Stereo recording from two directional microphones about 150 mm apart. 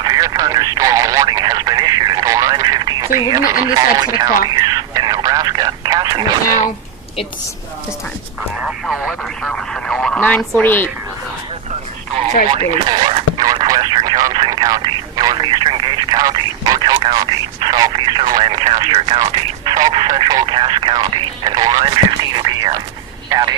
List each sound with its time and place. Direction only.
0.0 s speech: 25° right (ahead or behind)
4.4 s a sound: 25° right (ahead or behind)
8.6 s speech: centre (ahead or behind); by 10.8 s 15° left (ahead or behind)
12.5 s speech: 35° right (ahead or behind)